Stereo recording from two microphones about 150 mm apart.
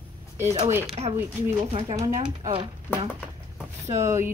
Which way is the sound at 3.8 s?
20° right (ahead or behind).